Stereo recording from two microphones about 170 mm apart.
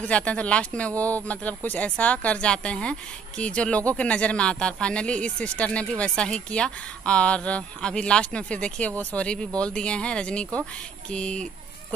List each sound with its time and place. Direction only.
0.1 s speech: 10° left (ahead or behind)